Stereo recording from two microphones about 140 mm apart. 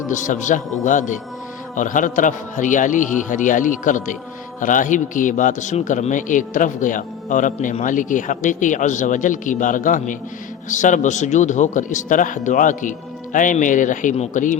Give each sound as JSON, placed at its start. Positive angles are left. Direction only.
{"t": 0.1, "sound": "a man's voice", "side_deg": 65}